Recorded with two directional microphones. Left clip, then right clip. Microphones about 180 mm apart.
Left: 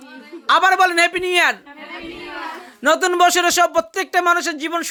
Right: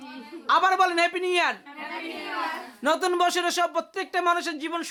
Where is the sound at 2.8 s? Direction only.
25° left (ahead or behind).